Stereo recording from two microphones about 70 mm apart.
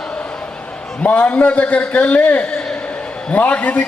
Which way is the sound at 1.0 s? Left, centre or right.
Left.